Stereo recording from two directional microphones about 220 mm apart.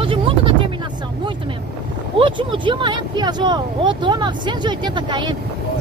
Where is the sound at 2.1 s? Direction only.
20° right (ahead or behind).